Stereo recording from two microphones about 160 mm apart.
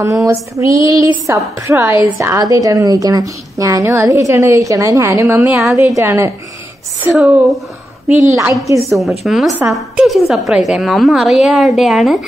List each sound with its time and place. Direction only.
0.0 s a woman's voice: 20° right (ahead or behind)
5.5 s a woman's voice: 5° right (ahead or behind)
5.9 s a woman's voice: 20° right (ahead or behind)
7.2 s a woman's voice: centre (ahead or behind)
8.8 s a woman's voice: centre (ahead or behind)